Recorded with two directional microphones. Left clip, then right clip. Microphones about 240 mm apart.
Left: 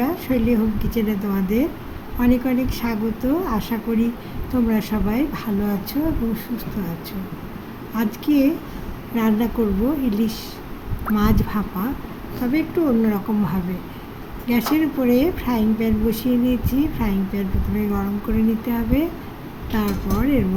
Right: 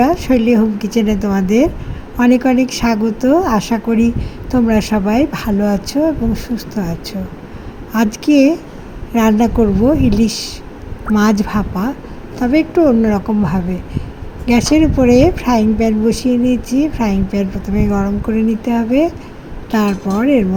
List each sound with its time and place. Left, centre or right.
0.0 s speech: right